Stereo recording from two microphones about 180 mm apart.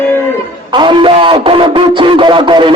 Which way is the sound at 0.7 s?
25° right (ahead or behind).